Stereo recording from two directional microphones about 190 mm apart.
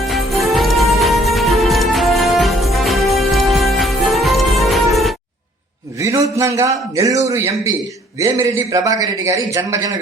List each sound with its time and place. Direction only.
0.0 s music: centre (ahead or behind)
6.0 s a man's voice: 15° right (ahead or behind)